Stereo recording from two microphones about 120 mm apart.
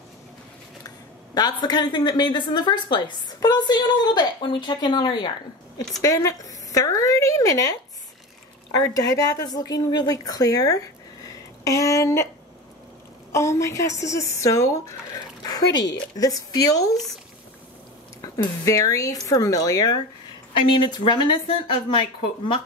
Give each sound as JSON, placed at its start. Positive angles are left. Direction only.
{"t": 0.8, "sound": "a woman's voice", "side_deg": 35}
{"t": 8.7, "sound": "a woman's voice", "side_deg": 30}
{"t": 13.3, "sound": "speech", "side_deg": 25}
{"t": 18.2, "sound": "a sound", "side_deg": 25}
{"t": 18.6, "sound": "speech", "side_deg": 25}
{"t": 20.7, "sound": "speech", "side_deg": 45}